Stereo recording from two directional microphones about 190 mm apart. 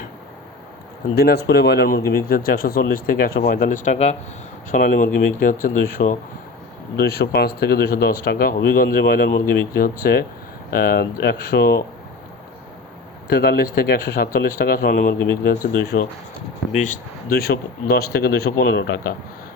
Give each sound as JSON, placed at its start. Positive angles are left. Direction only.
{"t": 1.1, "sound": "speech", "side_deg": 55}
{"t": 13.2, "sound": "speech", "side_deg": 55}
{"t": 16.7, "sound": "speech", "side_deg": 40}